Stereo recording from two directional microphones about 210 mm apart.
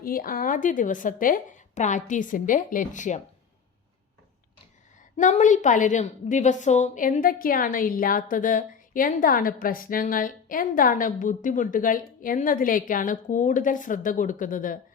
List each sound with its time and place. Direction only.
0.0 s a woman's voice: 45° left (ahead or behind)
5.1 s a woman's voice: 35° left (ahead or behind)